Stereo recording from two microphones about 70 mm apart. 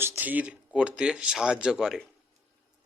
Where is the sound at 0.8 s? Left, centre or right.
Centre.